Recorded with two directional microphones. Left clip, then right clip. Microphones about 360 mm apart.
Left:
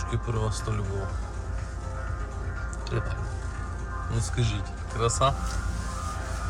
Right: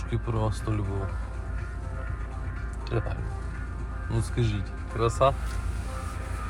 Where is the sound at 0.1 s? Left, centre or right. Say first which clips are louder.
Right 3 dB; centre.